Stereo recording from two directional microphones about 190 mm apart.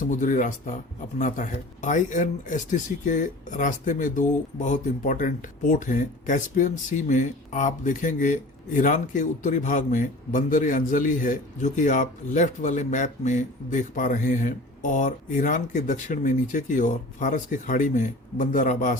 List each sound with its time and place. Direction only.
0.1 s speech: 40° left (ahead or behind)